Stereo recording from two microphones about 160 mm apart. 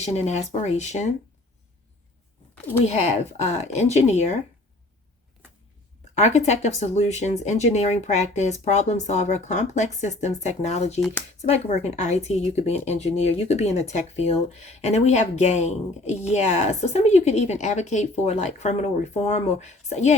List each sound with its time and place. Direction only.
0.0 s speech: 45° left (ahead or behind)
2.8 s speech: 45° left (ahead or behind)
6.1 s speech: 45° left (ahead or behind)